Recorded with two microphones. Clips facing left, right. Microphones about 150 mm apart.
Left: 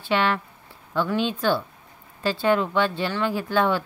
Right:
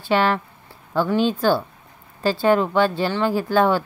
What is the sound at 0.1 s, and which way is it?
Speech, 40° right (ahead or behind).